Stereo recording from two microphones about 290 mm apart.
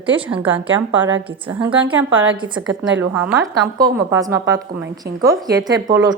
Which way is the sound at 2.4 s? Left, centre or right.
Centre.